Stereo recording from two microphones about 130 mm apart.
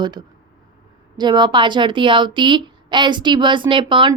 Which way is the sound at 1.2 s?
35° right (ahead or behind).